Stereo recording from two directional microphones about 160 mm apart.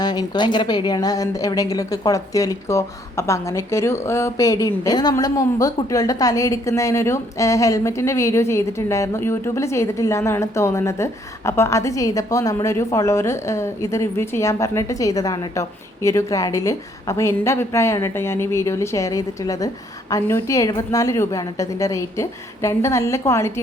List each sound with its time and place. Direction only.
0.0 s speech: 25° left (ahead or behind)